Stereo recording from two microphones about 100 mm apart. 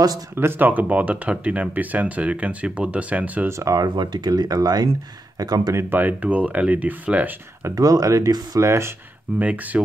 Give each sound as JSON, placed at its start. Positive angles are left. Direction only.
{"t": 0.4, "sound": "speech", "side_deg": -20}
{"t": 3.4, "sound": "speech", "side_deg": -30}
{"t": 5.8, "sound": "speech", "side_deg": -20}
{"t": 7.6, "sound": "speech", "side_deg": -35}
{"t": 9.4, "sound": "speech", "side_deg": -15}